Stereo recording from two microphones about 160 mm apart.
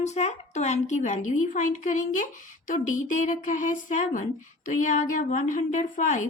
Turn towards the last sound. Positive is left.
turn(degrees=50)  # may be behind; listen again after turning